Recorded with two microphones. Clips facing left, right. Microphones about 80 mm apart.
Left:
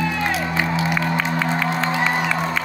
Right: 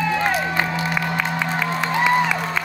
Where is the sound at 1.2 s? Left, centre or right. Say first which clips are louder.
Left 1 dB; centre.